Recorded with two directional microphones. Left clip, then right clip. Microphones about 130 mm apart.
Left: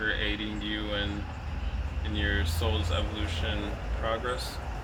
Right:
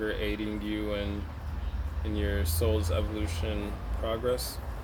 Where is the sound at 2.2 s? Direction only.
50° right (ahead or behind).